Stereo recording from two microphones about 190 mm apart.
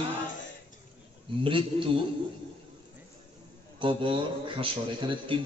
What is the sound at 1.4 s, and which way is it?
Speech, 25° right (ahead or behind).